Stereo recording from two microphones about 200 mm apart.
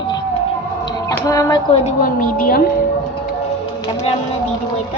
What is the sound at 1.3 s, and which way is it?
Speech, 15° left (ahead or behind).